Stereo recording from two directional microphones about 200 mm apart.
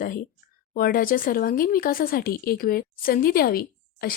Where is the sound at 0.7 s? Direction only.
45° left (ahead or behind).